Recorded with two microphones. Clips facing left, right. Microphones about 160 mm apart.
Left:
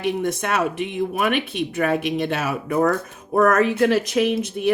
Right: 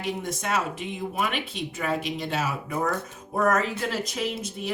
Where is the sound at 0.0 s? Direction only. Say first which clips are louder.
Left 7 dB; 60° left (ahead or behind).